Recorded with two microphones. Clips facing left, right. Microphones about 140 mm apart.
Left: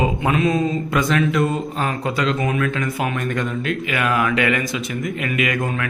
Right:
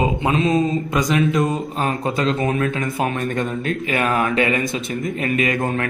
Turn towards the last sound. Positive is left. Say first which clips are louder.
# right 2 dB
turn(degrees=-30)  # may be behind; listen again after turning